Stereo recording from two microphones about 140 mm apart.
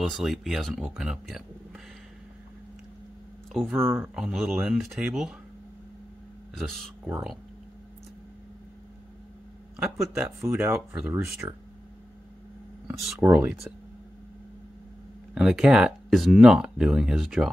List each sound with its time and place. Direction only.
0.0 s speech: centre (ahead or behind)
3.5 s speech: centre (ahead or behind)
3.8 s speech: 15° right (ahead or behind)
4.2 s speech: centre (ahead or behind)
6.5 s speech: centre (ahead or behind)
9.8 s speech: 5° right (ahead or behind)
12.8 s speech: centre (ahead or behind)
15.3 s speech: 5° right (ahead or behind)